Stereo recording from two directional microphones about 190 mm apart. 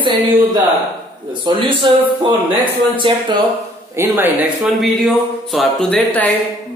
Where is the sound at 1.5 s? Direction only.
25° right (ahead or behind).